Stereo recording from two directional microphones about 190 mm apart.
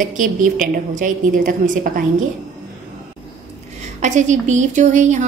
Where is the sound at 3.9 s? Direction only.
40° right (ahead or behind).